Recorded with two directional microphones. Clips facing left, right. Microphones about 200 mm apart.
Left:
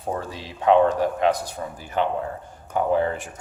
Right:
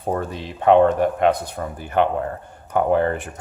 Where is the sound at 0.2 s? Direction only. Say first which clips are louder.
Right 5 dB; 55° right (ahead or behind).